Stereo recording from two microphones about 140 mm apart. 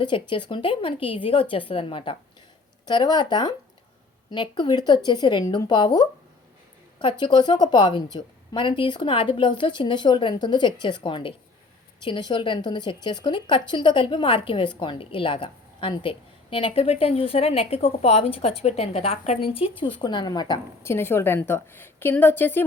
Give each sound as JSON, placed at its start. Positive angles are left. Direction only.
{"t": 0.0, "sound": "a woman's voice", "side_deg": 35}
{"t": 20.8, "sound": "a woman's voice", "side_deg": 15}